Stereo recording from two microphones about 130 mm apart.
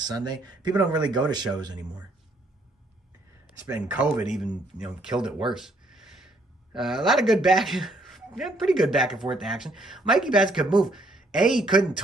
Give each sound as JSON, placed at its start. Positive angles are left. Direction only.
{"t": 0.0, "sound": "speech", "side_deg": -35}
{"t": 3.6, "sound": "speech", "side_deg": -10}